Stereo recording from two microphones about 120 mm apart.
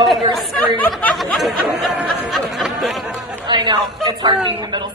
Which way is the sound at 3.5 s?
40° right (ahead or behind).